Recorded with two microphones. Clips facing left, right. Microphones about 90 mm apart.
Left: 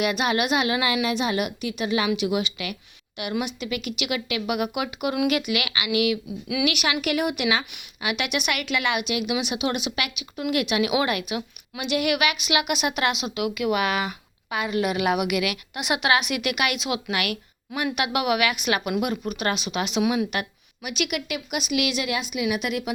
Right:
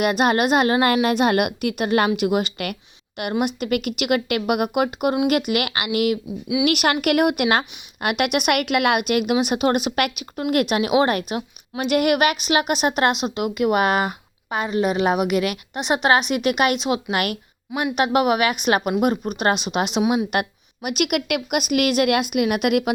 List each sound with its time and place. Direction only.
0.0 s a woman's voice: 45° right (ahead or behind)
20.0 s a woman's voice: 25° right (ahead or behind)
20.3 s a woman's voice: 50° right (ahead or behind)